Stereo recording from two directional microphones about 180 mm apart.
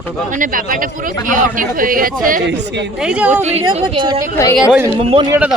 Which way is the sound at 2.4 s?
75° right (ahead or behind).